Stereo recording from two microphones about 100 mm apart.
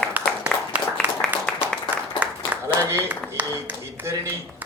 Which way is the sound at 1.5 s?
10° left (ahead or behind).